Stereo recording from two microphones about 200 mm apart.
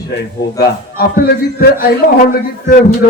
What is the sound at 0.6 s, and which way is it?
A man's voice, 55° left (ahead or behind).